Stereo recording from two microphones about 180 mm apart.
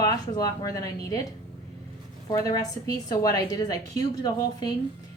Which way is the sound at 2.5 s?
20° left (ahead or behind).